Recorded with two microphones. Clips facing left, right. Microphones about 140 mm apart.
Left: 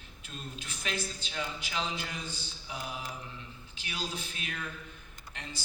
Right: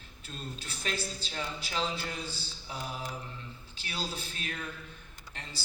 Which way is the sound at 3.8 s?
35° right (ahead or behind).